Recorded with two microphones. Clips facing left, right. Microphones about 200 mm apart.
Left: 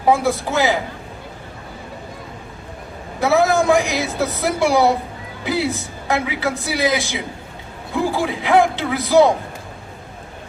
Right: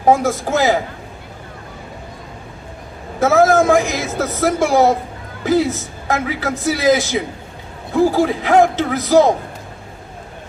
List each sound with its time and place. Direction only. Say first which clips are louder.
0.1 s a man's voice: right 2 dB; 45° right (ahead or behind)
3.2 s a man's voice: right 3 dB; 45° right (ahead or behind)